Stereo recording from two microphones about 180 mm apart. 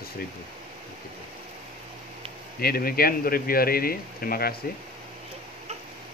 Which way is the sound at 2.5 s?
55° left (ahead or behind).